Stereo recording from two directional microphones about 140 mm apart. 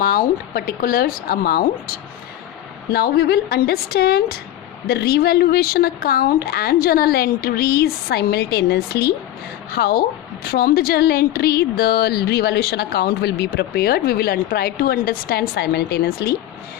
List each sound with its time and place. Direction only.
0.0 s a woman's voice: 90° left
9.7 s a woman's voice: 90° left